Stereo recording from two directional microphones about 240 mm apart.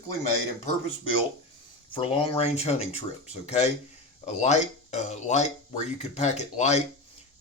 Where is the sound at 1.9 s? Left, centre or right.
Left.